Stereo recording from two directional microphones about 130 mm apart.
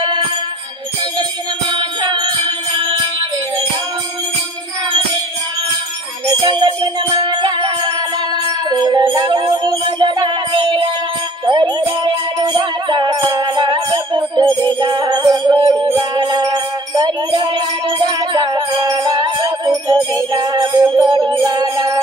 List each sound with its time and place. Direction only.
0.0 s music: 35° right (ahead or behind)
1.7 s music: 35° right (ahead or behind)
6.4 s music: 35° right (ahead or behind)